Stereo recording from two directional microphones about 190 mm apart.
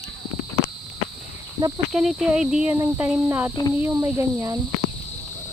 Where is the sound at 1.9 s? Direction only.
Centre (ahead or behind).